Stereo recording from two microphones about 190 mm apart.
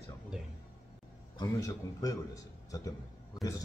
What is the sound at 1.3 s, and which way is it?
A man's voice, 20° left (ahead or behind).